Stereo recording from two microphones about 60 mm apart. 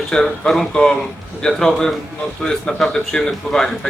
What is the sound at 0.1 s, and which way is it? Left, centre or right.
Speech, centre.